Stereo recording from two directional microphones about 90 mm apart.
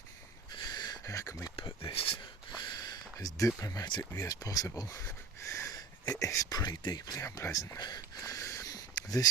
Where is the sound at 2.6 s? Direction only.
50° left (ahead or behind).